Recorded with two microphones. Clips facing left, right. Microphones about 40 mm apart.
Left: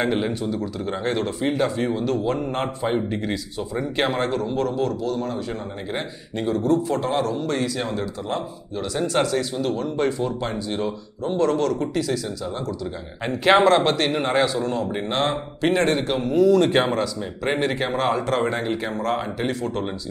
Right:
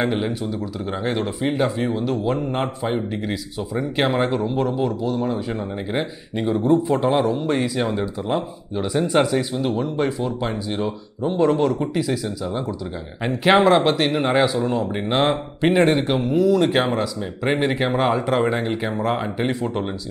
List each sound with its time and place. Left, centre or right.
0.0 s speech: centre
9.9 s speech: centre